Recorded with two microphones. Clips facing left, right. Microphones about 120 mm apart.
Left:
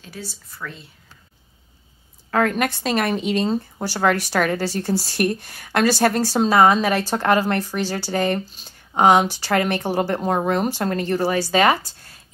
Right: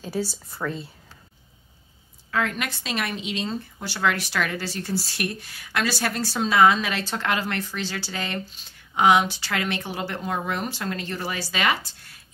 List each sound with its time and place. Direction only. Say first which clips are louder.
0.3 s speech: right 5 dB; 30° right (ahead or behind)
2.3 s speech: left 7 dB; 50° left (ahead or behind)